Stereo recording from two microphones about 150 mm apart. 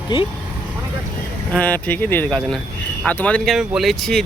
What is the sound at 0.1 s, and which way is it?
Speech, 30° left (ahead or behind).